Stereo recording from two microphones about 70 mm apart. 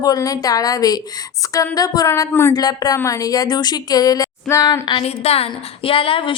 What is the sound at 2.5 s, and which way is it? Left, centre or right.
Speech, left.